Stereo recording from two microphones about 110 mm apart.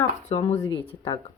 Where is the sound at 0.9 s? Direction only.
65° left (ahead or behind).